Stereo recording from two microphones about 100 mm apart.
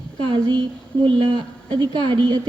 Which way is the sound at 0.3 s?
50° right (ahead or behind).